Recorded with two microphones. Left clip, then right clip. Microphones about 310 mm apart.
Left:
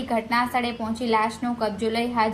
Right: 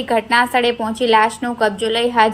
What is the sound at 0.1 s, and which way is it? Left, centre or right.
A woman's voice, right.